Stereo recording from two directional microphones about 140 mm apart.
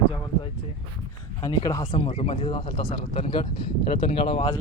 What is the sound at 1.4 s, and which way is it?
Speech, 30° left (ahead or behind).